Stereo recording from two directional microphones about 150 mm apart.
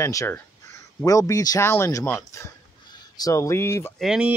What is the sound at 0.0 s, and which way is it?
Speech, 20° left (ahead or behind).